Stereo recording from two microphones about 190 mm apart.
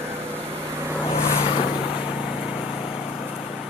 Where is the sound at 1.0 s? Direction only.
30° left (ahead or behind).